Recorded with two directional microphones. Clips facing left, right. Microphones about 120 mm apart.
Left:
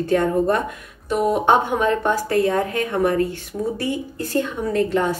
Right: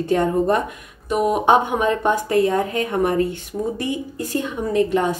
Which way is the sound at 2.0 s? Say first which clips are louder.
Right 1 dB; 20° right (ahead or behind).